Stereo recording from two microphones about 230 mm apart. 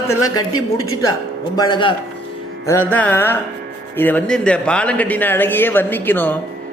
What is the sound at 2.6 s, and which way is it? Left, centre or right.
Speech, centre.